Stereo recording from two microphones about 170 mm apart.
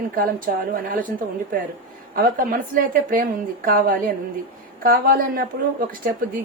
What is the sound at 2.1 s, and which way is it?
A woman's voice, 55° right (ahead or behind).